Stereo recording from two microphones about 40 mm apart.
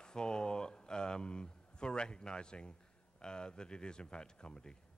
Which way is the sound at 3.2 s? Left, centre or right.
Left.